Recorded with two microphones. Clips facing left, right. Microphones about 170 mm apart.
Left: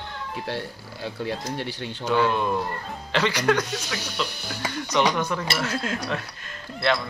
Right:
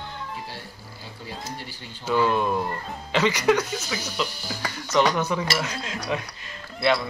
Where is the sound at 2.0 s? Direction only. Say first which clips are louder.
Even; 5° right (ahead or behind).